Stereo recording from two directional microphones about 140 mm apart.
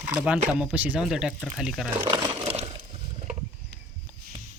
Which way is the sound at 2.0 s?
35° right (ahead or behind).